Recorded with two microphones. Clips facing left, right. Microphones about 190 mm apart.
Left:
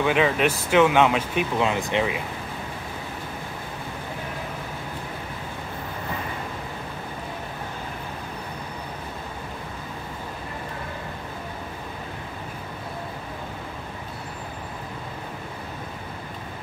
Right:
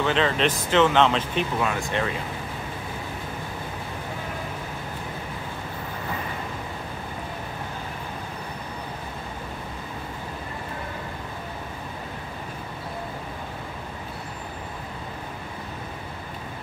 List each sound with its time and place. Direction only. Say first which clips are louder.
0.0 s speech: left 2 dB; 10° left (ahead or behind)
1.6 s speech: left 3 dB; 20° left (ahead or behind)